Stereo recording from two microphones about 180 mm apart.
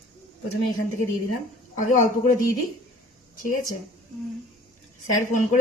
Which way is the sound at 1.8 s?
45° left (ahead or behind).